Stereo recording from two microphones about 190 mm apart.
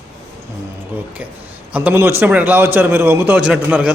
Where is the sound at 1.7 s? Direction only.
10° right (ahead or behind).